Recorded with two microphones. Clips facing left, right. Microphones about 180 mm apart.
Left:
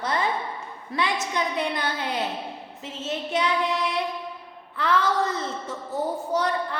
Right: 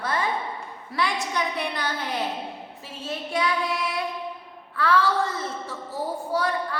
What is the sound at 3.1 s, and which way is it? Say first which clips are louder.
Speech: left 1 dB; 20° left (ahead or behind).